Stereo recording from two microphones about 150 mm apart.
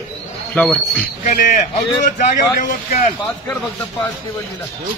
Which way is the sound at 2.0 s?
55° left (ahead or behind).